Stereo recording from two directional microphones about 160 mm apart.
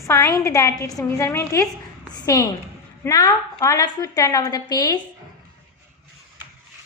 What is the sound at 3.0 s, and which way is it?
A woman's voice, 20° left (ahead or behind).